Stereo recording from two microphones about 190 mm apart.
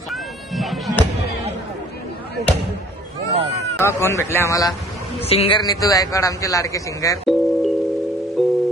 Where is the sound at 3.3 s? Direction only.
30° right (ahead or behind).